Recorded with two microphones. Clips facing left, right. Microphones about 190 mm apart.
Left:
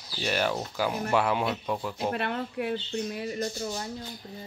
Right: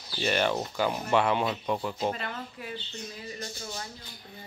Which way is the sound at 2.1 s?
60° left (ahead or behind).